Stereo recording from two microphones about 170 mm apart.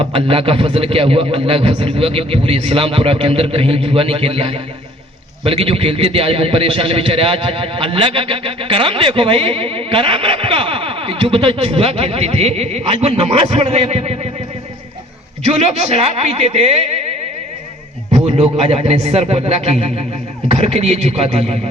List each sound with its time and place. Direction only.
0.0 s a man's voice: 30° right (ahead or behind)
15.4 s a man's voice: 40° right (ahead or behind)
18.1 s a man's voice: 35° right (ahead or behind)